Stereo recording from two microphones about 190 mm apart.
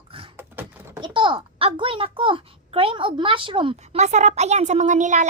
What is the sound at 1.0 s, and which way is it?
A child's voice, 25° right (ahead or behind).